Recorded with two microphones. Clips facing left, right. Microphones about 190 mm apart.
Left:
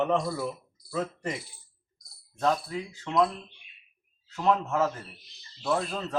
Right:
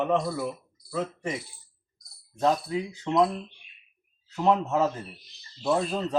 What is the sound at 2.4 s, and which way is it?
Speech, 20° right (ahead or behind).